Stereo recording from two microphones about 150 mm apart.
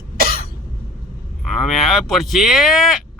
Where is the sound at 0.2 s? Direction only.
75° right (ahead or behind).